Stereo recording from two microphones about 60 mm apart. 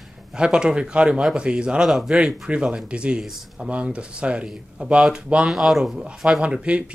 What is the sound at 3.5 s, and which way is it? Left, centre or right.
Speech, centre.